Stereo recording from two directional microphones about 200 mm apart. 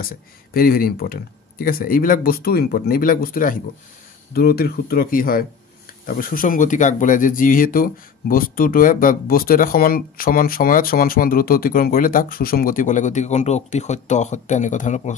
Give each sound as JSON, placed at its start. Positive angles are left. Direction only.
{"t": 0.0, "sound": "speech", "side_deg": 45}